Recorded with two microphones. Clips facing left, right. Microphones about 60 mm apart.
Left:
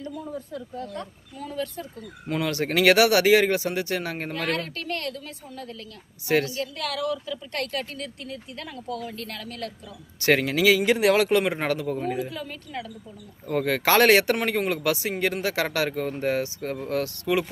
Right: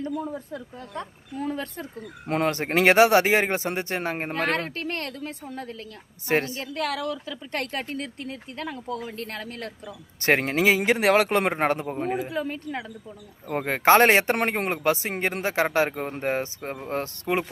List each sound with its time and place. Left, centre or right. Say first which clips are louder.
0.3 s a woman's voice: left 2 dB; right
2.2 s a woman's voice: right 2 dB; right